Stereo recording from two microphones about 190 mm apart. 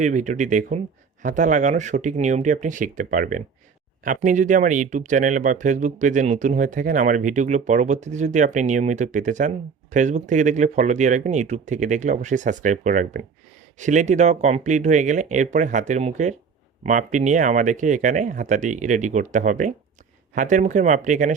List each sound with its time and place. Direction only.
0.0 s speech: 40° right (ahead or behind)